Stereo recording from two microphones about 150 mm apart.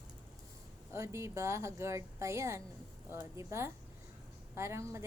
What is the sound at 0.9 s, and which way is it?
A woman's voice, 20° right (ahead or behind).